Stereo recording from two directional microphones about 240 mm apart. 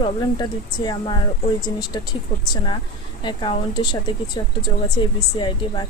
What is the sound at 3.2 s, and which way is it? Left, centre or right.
Speech, centre.